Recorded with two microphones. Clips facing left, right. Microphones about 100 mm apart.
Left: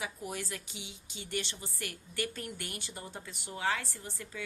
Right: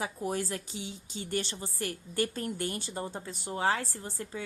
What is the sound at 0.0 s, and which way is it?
A woman's voice, 35° right (ahead or behind).